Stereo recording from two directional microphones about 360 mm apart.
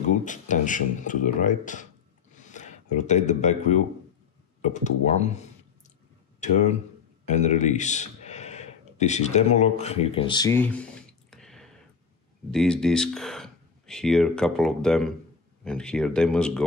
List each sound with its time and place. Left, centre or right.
0.2 s speech: left; by 16.6 s centre